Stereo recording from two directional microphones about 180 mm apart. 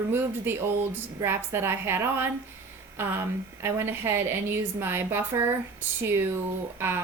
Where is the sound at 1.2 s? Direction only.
15° right (ahead or behind).